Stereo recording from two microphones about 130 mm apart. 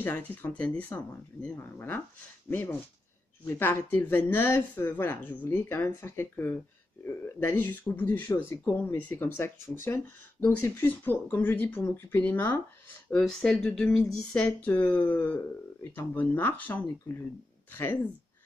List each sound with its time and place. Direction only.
0.0 s speech: 15° left (ahead or behind)
3.4 s speech: 15° left (ahead or behind)